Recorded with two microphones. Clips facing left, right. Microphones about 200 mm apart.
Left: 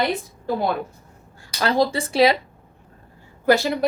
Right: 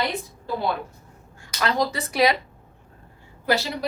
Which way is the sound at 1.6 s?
30° left (ahead or behind).